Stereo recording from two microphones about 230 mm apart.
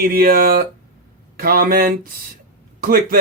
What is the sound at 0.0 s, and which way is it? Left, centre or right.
Speech, right.